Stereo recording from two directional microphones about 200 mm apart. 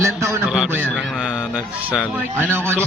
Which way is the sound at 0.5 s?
5° right (ahead or behind).